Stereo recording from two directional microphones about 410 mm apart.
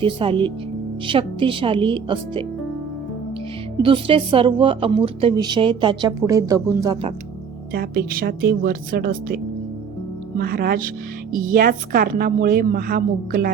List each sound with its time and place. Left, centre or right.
0.0 s a woman's voice: centre
3.8 s a woman's voice: centre
7.7 s a woman's voice: right